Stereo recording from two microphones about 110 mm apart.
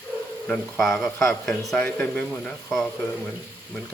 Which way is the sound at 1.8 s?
10° left (ahead or behind).